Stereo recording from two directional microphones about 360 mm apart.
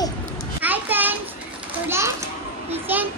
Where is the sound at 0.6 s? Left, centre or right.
Centre.